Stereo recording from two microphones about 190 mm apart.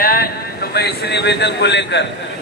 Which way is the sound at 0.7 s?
60° left (ahead or behind).